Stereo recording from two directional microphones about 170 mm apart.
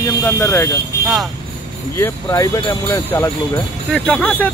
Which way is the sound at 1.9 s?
15° left (ahead or behind).